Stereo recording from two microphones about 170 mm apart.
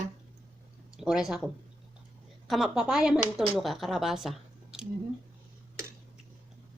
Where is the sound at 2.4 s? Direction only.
Centre (ahead or behind).